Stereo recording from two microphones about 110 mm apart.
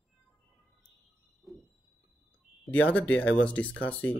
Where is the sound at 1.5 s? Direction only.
Centre (ahead or behind).